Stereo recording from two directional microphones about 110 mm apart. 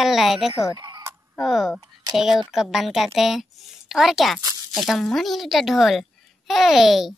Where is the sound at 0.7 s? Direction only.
40° right (ahead or behind).